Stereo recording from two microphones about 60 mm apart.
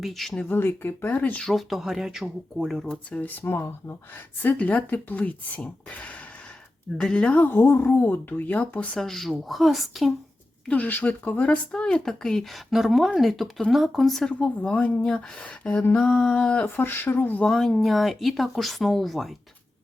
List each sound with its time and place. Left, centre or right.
0.0 s speech: centre
0.4 s speech: left
1.5 s speech: centre
2.6 s speech: centre
3.2 s speech: left
3.4 s speech: left
4.4 s speech: left
7.0 s speech: centre
9.0 s speech: centre
10.7 s speech: left; by 12.5 s centre
12.7 s speech: centre
14.3 s speech: centre
16.6 s speech: left
17.5 s speech: centre